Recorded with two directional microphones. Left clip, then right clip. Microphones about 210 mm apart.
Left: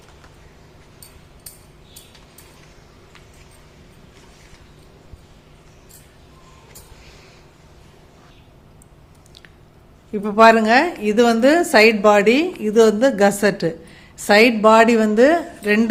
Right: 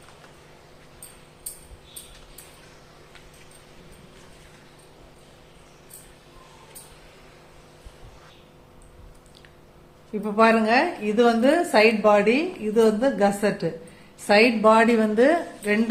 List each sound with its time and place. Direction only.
10.2 s a woman's voice: 40° left (ahead or behind)